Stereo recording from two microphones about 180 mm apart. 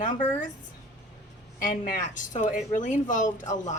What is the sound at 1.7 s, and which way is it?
Speech, 45° left (ahead or behind).